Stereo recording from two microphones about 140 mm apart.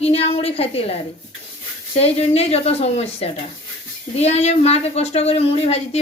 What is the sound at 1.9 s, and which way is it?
Speech, 45° left (ahead or behind).